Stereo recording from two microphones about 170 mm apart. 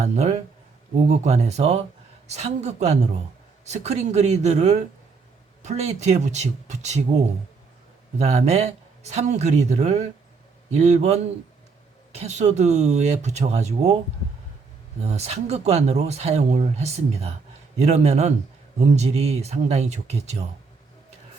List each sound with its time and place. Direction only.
0.0 s speech: 40° right (ahead or behind)
8.2 s speech: 40° right (ahead or behind)
15.0 s speech: 40° right (ahead or behind)